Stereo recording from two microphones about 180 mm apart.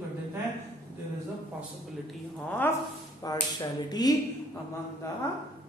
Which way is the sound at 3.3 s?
20° left (ahead or behind).